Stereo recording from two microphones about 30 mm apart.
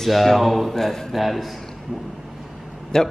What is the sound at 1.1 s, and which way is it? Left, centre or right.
Speech, centre.